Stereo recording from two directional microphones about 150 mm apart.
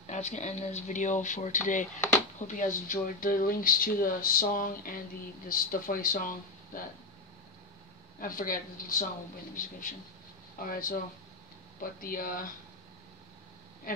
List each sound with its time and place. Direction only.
0.0 s speech: 50° left (ahead or behind); by 6.8 s 70° left (ahead or behind)
8.2 s a man's voice: 70° left (ahead or behind)
13.9 s a man's voice: 65° left (ahead or behind)